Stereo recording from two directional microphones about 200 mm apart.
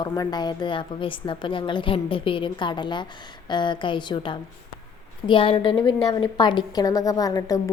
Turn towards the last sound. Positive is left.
turn(degrees=15)  # may be behind; listen again after turning